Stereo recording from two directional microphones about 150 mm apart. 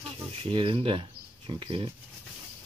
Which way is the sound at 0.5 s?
35° right (ahead or behind).